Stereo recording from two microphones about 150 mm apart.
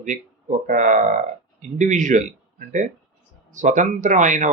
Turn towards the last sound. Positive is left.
turn(degrees=-55)  # may be behind; listen again after turning